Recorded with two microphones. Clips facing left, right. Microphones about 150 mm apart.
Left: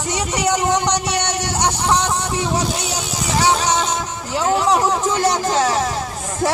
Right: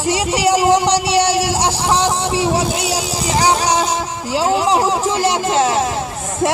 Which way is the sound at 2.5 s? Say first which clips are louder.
Right 4 dB; 30° right (ahead or behind).